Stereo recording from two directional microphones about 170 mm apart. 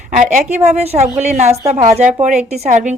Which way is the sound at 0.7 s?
40° right (ahead or behind).